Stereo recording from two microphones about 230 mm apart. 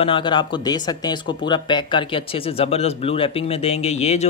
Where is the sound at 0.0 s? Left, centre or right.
Left.